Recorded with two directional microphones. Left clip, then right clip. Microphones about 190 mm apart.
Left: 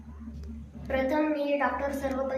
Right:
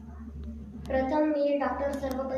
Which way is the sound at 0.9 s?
5° left (ahead or behind).